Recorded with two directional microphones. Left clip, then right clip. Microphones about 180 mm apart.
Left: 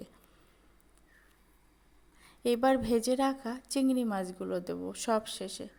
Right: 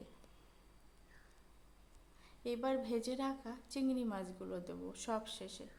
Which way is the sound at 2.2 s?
35° left (ahead or behind).